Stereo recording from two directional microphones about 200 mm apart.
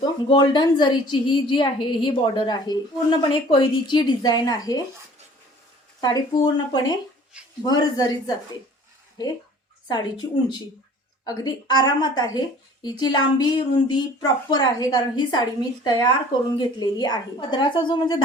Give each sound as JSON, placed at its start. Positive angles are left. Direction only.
{"t": 0.0, "sound": "a woman's voice", "side_deg": 20}
{"t": 6.0, "sound": "a woman's voice", "side_deg": 20}
{"t": 9.9, "sound": "a woman's voice", "side_deg": 20}